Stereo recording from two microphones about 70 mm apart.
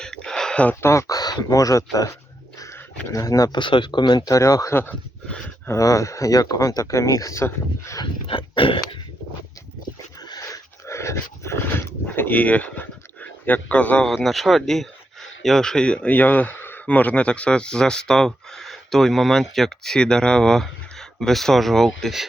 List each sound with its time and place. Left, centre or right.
0.0 s a sound: centre
0.8 s speech: left
3.5 s speech: left
4.2 s speech: left
4.7 s speech: left
5.7 s speech: left
10.2 s dog: left
10.8 s speech: left; by 14.1 s centre
14.3 s speech: centre